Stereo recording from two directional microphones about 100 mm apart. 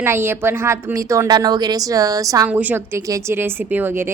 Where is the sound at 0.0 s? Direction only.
25° right (ahead or behind).